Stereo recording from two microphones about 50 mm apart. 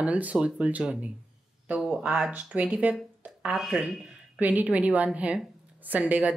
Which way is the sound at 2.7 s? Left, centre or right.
Right.